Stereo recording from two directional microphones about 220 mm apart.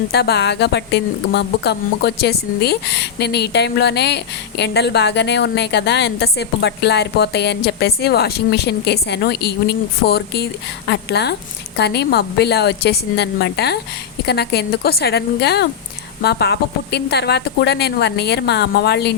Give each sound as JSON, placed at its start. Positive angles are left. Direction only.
{"t": 0.1, "sound": "a woman's voice", "side_deg": 50}